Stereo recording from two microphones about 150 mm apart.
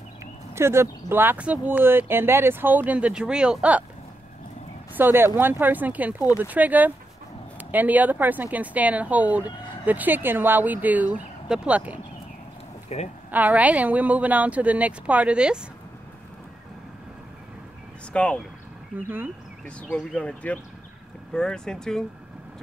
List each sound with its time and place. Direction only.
0.2 s speech: 15° right (ahead or behind)
4.9 s speech: 15° right (ahead or behind)
12.9 s a woman's voice: 45° left (ahead or behind)
13.3 s speech: 10° right (ahead or behind)
18.1 s speech: 10° left (ahead or behind)
18.9 s speech: 15° right (ahead or behind)
19.6 s speech: 5° left (ahead or behind)